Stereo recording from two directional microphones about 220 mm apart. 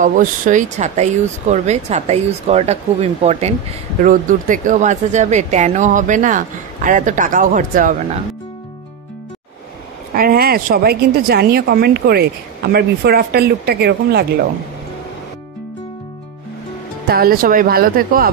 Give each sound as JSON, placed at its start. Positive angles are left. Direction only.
{"t": 0.0, "sound": "speech", "side_deg": -35}
{"t": 10.1, "sound": "a woman's voice", "side_deg": -40}
{"t": 17.1, "sound": "speech", "side_deg": -40}